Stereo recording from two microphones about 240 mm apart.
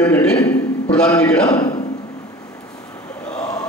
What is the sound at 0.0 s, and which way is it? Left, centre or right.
Speech, centre.